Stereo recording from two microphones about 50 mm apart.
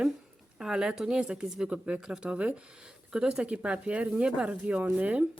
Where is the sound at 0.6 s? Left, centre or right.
Centre; by 5.2 s right.